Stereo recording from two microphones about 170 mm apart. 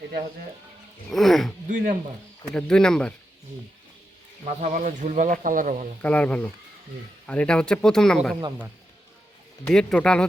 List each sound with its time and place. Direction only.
1.1 s speech: centre (ahead or behind)
1.6 s speech: 55° right (ahead or behind)
2.4 s speech: 5° left (ahead or behind)
4.4 s speech: 50° right (ahead or behind)
6.0 s speech: 10° left (ahead or behind)
9.6 s speech: 5° left (ahead or behind)